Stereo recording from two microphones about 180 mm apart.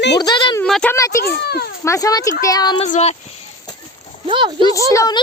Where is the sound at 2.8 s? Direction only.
35° left (ahead or behind).